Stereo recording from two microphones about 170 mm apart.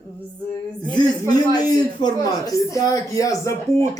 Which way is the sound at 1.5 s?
25° left (ahead or behind).